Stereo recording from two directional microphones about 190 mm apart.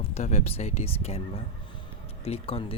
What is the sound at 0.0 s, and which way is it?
Speech, 35° left (ahead or behind).